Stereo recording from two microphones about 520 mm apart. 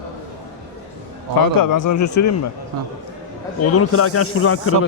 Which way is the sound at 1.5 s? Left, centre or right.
Left.